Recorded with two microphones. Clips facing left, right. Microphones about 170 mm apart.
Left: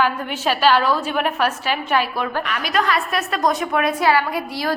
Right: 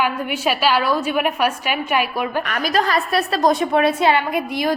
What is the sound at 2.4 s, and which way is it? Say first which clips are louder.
A woman's voice: right 2 dB; 45° right (ahead or behind).